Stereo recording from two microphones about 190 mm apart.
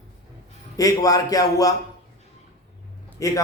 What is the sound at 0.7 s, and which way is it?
A man's voice, 20° left (ahead or behind).